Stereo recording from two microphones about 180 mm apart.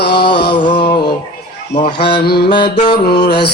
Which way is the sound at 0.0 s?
65° left (ahead or behind).